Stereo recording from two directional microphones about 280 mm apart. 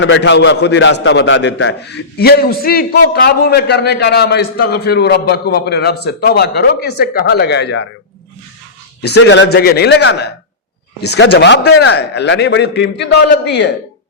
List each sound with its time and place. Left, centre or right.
0.0 s a man's voice: left
9.1 s a man's voice: left